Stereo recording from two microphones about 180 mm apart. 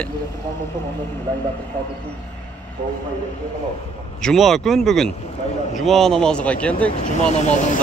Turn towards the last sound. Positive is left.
turn(degrees=40)  # may be behind; listen again after turning